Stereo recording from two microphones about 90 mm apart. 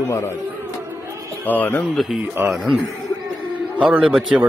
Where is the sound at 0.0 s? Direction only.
35° left (ahead or behind).